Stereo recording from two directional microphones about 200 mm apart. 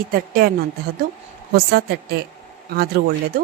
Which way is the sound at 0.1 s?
50° right (ahead or behind).